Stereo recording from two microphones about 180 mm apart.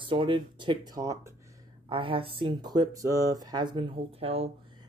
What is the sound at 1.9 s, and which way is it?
Speech, 30° right (ahead or behind).